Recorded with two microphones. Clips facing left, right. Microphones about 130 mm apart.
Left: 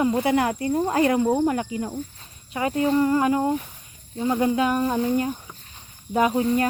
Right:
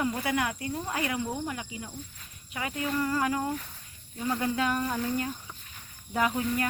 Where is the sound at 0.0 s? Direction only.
25° left (ahead or behind); by 2.0 s 50° left (ahead or behind).